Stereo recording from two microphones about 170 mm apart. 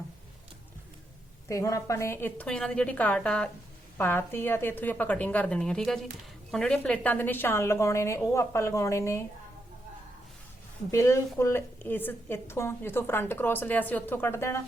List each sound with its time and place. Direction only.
1.5 s a woman's voice: 20° left (ahead or behind)
10.9 s a woman's voice: 15° left (ahead or behind)